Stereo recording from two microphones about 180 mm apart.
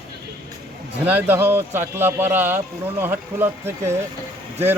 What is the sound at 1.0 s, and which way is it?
Speech, 10° right (ahead or behind).